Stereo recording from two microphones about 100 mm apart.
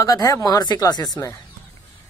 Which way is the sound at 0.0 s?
35° left (ahead or behind).